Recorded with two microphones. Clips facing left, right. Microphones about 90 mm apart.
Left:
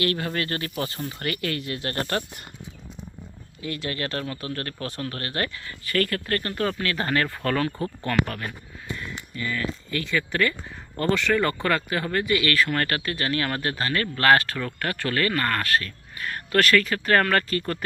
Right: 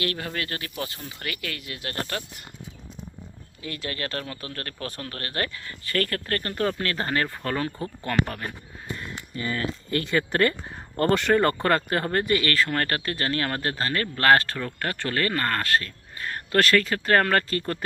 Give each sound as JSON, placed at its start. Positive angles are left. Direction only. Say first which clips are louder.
{"t": 0.3, "sound": "speech", "louder": "left 4 dB", "side_deg": -5}
{"t": 1.5, "sound": "speech", "louder": "left 6 dB", "side_deg": 40}
{"t": 3.6, "sound": "speech", "louder": "left 3 dB", "side_deg": 20}
{"t": 5.8, "sound": "speech", "louder": "left 2 dB", "side_deg": -30}
{"t": 9.9, "sound": "speech", "louder": "right 3 dB", "side_deg": -45}
{"t": 11.6, "sound": "speech", "louder": "right 2 dB", "side_deg": -35}